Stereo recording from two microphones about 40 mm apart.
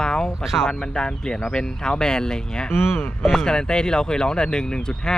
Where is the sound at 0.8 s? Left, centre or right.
Centre.